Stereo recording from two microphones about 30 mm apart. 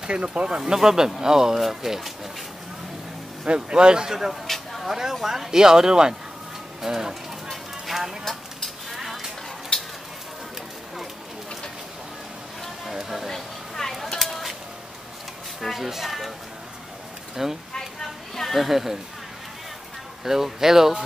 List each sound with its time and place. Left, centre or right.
0.0 s a man's voice: right
0.6 s speech: centre
3.4 s a man's voice: right
4.3 s a sound: centre
5.2 s speech: centre
7.8 s music: centre
8.3 s vehicle: centre
8.9 s a sound: centre
9.7 s a sound: left
12.9 s music: centre
13.3 s a sound: centre
15.7 s speech: centre
17.4 s speech: centre
20.2 s speech: centre